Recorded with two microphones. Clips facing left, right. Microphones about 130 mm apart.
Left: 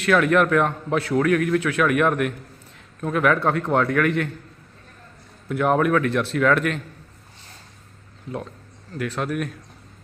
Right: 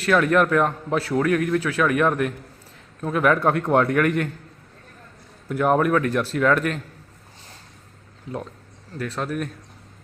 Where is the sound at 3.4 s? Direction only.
15° right (ahead or behind).